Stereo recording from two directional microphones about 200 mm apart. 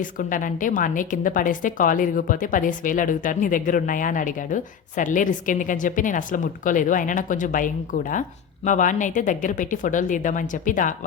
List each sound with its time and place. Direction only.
0.0 s a woman's voice: 40° left (ahead or behind)